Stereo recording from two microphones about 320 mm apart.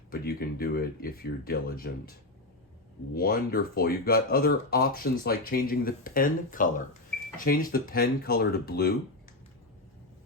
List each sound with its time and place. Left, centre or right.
0.1 s speech: left
3.2 s speech: left